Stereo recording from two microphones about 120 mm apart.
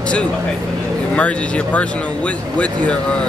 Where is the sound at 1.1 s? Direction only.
10° left (ahead or behind).